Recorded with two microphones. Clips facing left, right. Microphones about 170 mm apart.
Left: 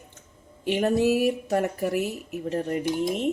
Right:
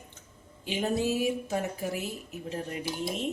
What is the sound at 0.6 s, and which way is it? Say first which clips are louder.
Speech: left 7 dB; 65° left (ahead or behind).